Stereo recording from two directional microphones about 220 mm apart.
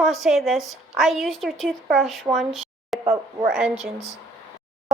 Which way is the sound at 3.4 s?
Centre (ahead or behind).